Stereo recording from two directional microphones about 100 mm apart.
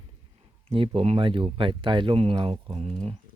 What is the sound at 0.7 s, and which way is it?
Speech, 70° right (ahead or behind).